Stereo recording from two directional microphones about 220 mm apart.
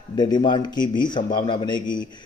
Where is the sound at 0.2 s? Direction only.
20° left (ahead or behind).